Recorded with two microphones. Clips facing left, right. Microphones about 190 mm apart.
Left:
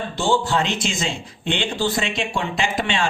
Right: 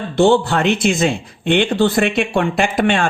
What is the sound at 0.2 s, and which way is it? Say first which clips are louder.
Speech: right 8 dB; 60° right (ahead or behind).